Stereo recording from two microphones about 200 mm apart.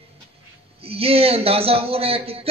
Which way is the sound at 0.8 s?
30° right (ahead or behind).